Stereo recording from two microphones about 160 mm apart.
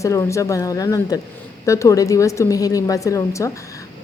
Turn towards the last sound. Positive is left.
turn(degrees=20)  # may be behind; listen again after turning